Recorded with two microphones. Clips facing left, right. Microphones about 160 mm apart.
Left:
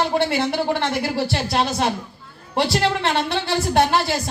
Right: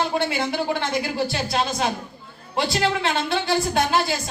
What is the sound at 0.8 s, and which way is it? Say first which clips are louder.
Speech: left 2 dB; 65° left (ahead or behind).